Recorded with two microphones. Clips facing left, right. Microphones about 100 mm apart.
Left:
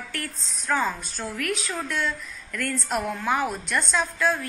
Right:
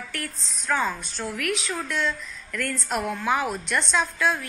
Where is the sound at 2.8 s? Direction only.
Centre (ahead or behind).